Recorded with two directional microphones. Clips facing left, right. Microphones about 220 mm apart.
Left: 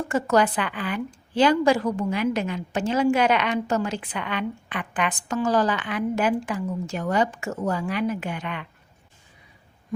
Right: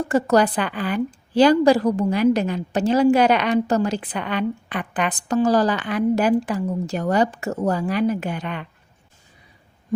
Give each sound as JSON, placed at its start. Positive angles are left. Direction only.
{"t": 0.1, "sound": "a woman's voice", "side_deg": -35}